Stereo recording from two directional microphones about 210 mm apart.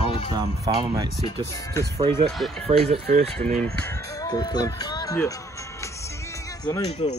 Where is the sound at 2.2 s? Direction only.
Centre (ahead or behind).